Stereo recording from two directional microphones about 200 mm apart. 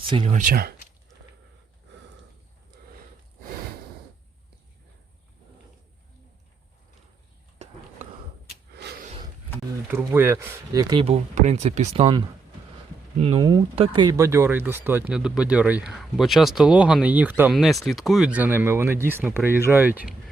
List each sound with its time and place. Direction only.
0.1 s speech: 30° right (ahead or behind); by 0.8 s 50° right (ahead or behind)
8.7 s a sound: 55° right (ahead or behind)
9.9 s speech: 10° right (ahead or behind)
11.0 s speech: 35° right (ahead or behind)
13.2 s speech: 25° right (ahead or behind); by 20.1 s 10° right (ahead or behind)